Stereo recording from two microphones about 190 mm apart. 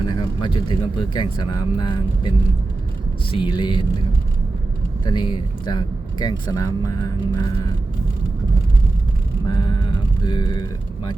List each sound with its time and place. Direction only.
0.0 s speech: 20° left (ahead or behind)
3.3 s speech: 25° left (ahead or behind)
5.0 s speech: 25° left (ahead or behind)
9.6 s mantra: 25° left (ahead or behind)